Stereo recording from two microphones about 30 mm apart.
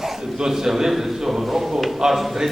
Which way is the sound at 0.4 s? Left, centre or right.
Centre.